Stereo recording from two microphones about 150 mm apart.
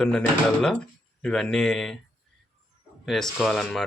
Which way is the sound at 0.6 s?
5° left (ahead or behind).